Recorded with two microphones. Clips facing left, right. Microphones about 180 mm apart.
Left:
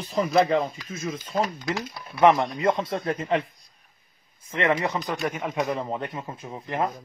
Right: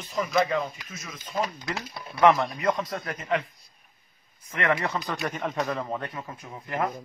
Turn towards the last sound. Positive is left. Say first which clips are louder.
# left 2 dB
turn(degrees=25)  # may be behind; listen again after turning